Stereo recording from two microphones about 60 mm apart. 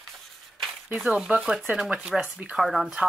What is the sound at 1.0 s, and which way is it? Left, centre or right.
Speech, centre.